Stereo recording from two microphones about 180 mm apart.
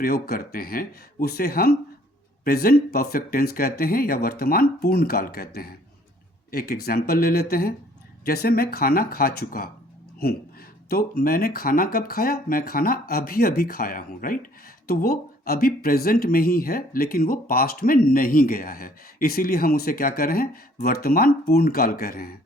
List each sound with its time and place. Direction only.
0.0 s speech: 55° left (ahead or behind)
10.8 s speech: 60° left (ahead or behind)